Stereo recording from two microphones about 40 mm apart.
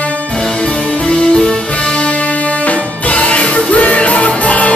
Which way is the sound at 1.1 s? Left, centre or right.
Left.